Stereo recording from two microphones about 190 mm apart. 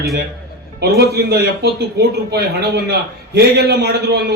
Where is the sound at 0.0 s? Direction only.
55° right (ahead or behind).